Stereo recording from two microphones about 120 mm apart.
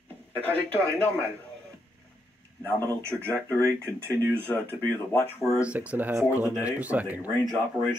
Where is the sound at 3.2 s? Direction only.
10° left (ahead or behind).